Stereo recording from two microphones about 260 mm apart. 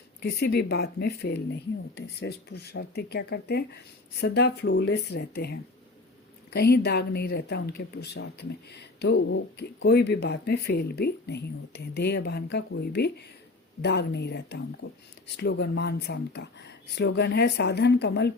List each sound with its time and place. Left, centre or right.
0.2 s speech: left